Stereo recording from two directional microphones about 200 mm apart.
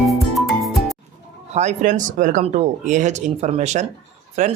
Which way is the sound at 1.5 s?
35° right (ahead or behind).